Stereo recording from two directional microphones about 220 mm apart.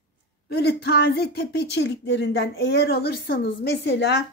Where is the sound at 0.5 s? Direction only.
45° left (ahead or behind).